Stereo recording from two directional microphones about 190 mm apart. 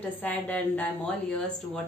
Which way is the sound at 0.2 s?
10° left (ahead or behind).